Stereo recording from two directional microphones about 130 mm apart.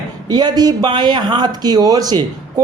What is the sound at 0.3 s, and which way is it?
Speech, 30° right (ahead or behind).